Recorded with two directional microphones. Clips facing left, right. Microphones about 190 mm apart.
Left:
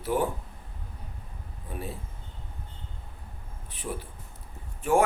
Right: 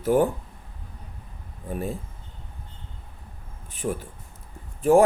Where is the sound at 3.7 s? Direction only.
45° right (ahead or behind).